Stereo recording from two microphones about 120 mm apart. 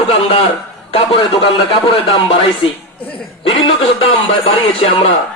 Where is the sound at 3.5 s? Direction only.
50° left (ahead or behind).